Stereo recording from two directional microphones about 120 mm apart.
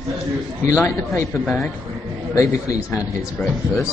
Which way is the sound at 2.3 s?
30° left (ahead or behind).